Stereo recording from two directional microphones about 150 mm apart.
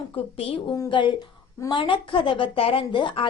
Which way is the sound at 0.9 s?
35° left (ahead or behind).